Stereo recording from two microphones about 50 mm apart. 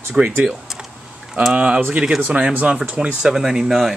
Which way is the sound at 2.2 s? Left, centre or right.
Right.